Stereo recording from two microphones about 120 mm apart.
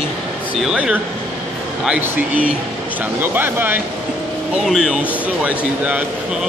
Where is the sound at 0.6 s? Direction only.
5° right (ahead or behind).